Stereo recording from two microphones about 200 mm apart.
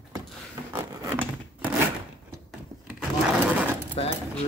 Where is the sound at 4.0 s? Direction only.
30° left (ahead or behind).